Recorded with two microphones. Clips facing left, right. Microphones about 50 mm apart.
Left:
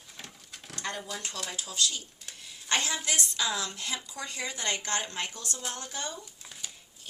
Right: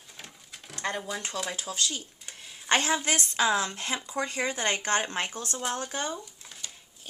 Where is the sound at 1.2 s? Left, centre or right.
Centre.